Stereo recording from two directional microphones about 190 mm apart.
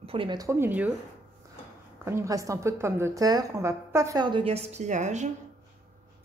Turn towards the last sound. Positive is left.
turn(degrees=-40)  # may be behind; listen again after turning